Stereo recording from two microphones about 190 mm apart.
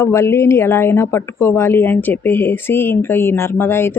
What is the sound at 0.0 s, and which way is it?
Speech, 15° left (ahead or behind).